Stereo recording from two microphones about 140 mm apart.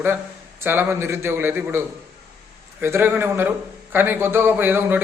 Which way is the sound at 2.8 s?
15° right (ahead or behind).